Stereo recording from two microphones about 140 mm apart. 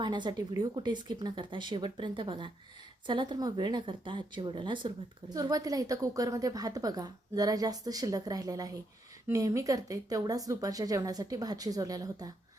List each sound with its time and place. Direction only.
0.0 s a woman's voice: 35° right (ahead or behind)